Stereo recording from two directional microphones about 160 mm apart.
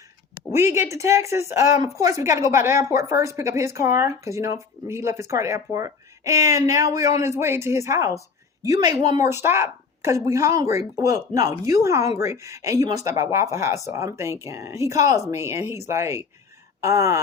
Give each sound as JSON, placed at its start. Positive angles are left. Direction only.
{"t": 0.5, "sound": "speech", "side_deg": -15}